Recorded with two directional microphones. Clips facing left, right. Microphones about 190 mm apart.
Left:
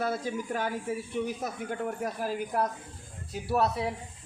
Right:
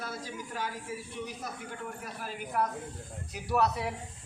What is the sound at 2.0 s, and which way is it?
Speech, 45° left (ahead or behind).